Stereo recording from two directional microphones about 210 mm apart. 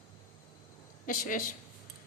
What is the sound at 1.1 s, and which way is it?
Speech, 40° left (ahead or behind).